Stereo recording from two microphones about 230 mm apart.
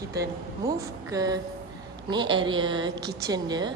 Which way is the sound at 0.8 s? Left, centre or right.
Centre.